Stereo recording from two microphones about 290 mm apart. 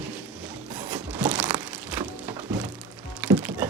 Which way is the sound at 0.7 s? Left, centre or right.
Centre.